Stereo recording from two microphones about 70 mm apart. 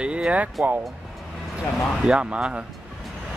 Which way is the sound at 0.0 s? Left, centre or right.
Centre.